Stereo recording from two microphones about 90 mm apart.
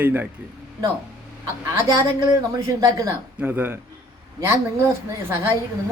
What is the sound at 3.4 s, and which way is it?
Speech, 20° right (ahead or behind).